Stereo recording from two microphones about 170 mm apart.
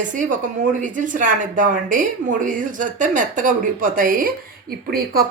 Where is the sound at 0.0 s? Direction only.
50° right (ahead or behind).